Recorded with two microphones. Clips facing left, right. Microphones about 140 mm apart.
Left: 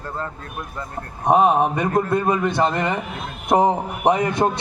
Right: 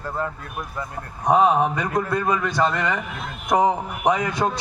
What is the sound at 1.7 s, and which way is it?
Speech, 55° left (ahead or behind).